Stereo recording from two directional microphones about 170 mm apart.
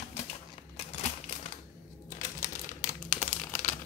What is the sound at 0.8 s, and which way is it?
Typewriter, 35° left (ahead or behind).